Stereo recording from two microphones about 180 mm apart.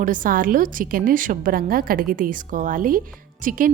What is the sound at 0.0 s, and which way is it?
A woman's voice, 50° right (ahead or behind).